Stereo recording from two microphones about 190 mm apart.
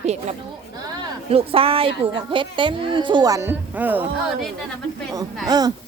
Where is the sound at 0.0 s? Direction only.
35° right (ahead or behind); by 4.1 s 10° right (ahead or behind).